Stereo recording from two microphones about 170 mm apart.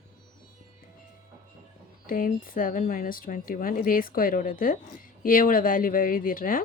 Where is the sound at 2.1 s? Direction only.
55° left (ahead or behind).